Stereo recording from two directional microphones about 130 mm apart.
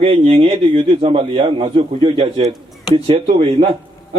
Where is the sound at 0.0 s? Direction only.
45° right (ahead or behind).